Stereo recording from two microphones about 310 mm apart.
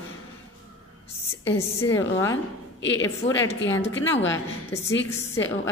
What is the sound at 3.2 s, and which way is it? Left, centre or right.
Speech, left.